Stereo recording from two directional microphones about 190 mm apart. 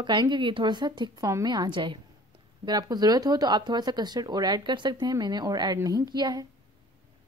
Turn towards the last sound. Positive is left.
turn(degrees=-20)  # may be behind; listen again after turning